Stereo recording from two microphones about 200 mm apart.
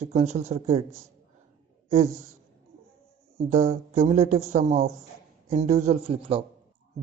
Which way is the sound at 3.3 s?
35° right (ahead or behind).